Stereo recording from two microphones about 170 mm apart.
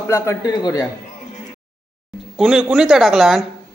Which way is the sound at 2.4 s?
Centre (ahead or behind).